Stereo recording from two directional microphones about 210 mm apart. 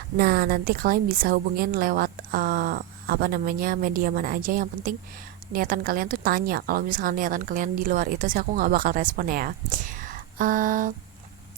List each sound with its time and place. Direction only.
0.2 s a woman's voice: 45° right (ahead or behind)